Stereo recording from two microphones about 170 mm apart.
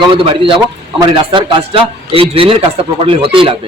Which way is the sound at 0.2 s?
30° right (ahead or behind).